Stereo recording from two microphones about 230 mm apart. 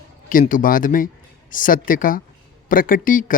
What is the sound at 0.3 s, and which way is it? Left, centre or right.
A man's voice, left.